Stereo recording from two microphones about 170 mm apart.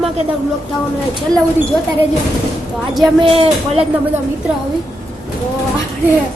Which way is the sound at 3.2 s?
35° right (ahead or behind).